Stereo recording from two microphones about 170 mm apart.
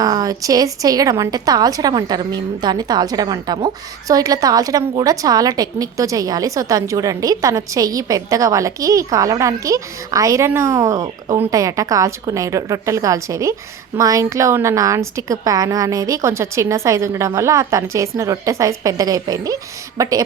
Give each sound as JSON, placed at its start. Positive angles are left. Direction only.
{"t": 0.0, "sound": "a woman's voice", "side_deg": -20}